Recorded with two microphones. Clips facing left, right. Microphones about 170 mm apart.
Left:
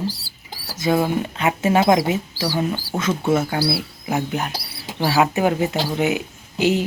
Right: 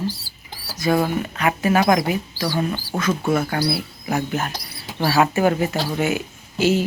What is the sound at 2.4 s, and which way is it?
Speech, 10° left (ahead or behind).